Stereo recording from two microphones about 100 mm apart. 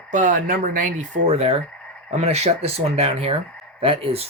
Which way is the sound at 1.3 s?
90° right.